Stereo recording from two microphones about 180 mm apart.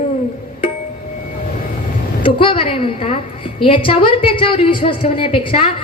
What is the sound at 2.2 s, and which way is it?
A woman's voice, 30° left (ahead or behind).